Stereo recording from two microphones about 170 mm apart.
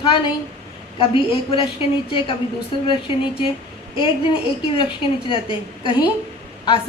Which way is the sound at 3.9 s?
30° left (ahead or behind).